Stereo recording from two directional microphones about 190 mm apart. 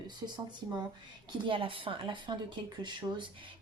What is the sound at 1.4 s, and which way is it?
Speech, 25° right (ahead or behind).